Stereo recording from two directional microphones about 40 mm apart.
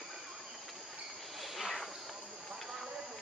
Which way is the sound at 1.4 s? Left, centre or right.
Centre.